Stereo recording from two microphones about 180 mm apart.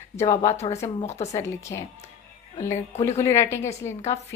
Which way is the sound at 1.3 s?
15° left (ahead or behind).